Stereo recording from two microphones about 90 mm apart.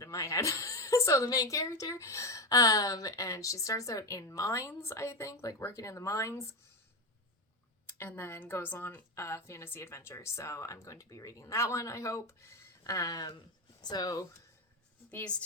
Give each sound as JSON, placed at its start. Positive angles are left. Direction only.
{"t": 0.0, "sound": "a woman's voice", "side_deg": 35}
{"t": 7.9, "sound": "a woman's voice", "side_deg": 25}
{"t": 15.1, "sound": "a woman's voice", "side_deg": 15}